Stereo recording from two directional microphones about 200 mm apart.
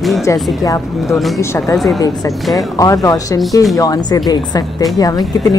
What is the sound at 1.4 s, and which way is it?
Music, 15° left (ahead or behind).